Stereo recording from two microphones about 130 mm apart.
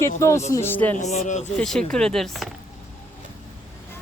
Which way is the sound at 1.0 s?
60° left (ahead or behind).